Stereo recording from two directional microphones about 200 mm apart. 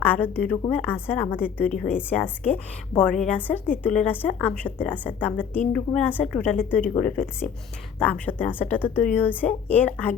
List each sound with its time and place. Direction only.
0.0 s a woman's voice: 10° left (ahead or behind)